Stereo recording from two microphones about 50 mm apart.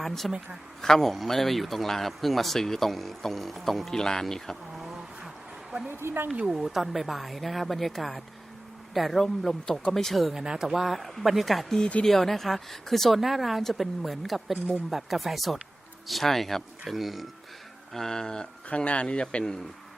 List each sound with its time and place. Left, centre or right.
0.0 s a woman's voice: centre
5.9 s speech: right
6.4 s speech: centre
10.3 s speech: centre
11.8 s speech: left
12.0 s speech: centre
17.9 s speech: centre
18.7 s speech: left